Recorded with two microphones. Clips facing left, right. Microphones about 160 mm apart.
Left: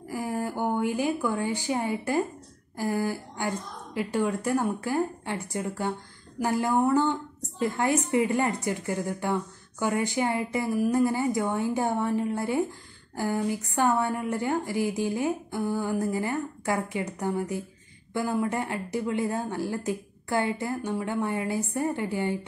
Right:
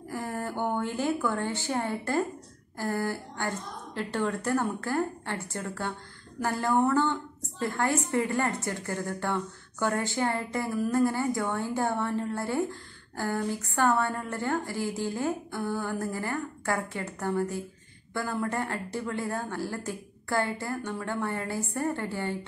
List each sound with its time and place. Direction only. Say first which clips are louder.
0.1 s a woman's voice: left 3 dB; 10° left (ahead or behind)